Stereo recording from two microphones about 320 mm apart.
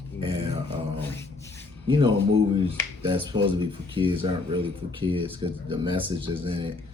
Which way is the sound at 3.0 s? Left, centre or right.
Centre.